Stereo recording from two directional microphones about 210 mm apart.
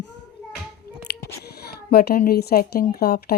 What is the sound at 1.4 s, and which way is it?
A child's voice, 50° left (ahead or behind).